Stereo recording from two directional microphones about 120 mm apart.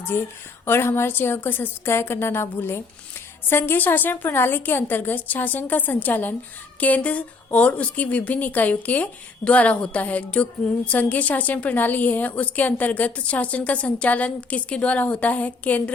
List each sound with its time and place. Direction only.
0.0 s a woman's voice: 15° left (ahead or behind)